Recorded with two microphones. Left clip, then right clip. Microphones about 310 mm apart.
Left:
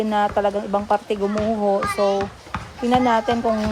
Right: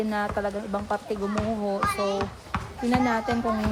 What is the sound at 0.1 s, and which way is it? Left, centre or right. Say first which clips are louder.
Speech: left 8 dB; centre.